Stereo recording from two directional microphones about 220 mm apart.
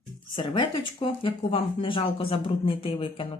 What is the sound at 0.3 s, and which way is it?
Speech, 25° left (ahead or behind).